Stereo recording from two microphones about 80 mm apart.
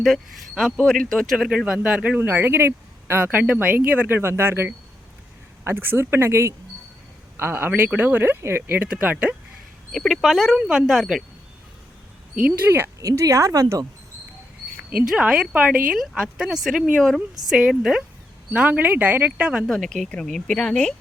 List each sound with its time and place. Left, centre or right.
0.0 s speech: centre
1.4 s speech: centre
9.9 s speech: centre
12.5 s speech: right
13.0 s speech: right
15.0 s a woman's voice: centre
19.6 s speech: centre